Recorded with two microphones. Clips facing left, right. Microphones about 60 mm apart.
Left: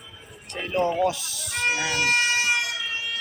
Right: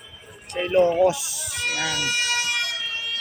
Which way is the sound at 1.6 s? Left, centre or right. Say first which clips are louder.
Left 1 dB; left.